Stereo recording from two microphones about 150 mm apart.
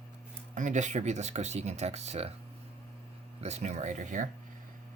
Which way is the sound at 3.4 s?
45° right (ahead or behind).